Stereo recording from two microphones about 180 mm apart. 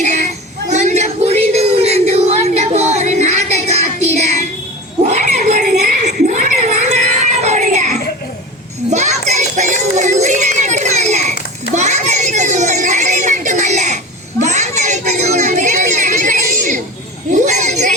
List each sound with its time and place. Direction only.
0.0 s female singing: 40° right (ahead or behind)
0.7 s music: 40° right (ahead or behind)
5.0 s cat: 40° right (ahead or behind)
8.9 s music: 40° right (ahead or behind)
11.7 s a sound: 40° right (ahead or behind)